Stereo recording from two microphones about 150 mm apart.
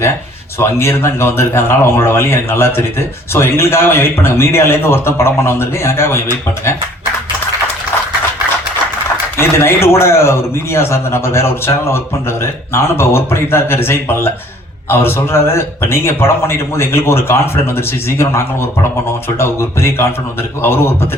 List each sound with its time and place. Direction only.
0.6 s a man's voice: 15° left (ahead or behind)
9.4 s a man's voice: 15° left (ahead or behind)